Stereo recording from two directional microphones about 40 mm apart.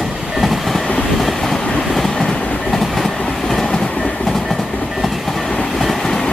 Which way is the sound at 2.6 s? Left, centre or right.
Centre.